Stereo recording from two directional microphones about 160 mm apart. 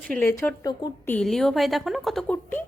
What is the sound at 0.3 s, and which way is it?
A woman's voice, 15° left (ahead or behind).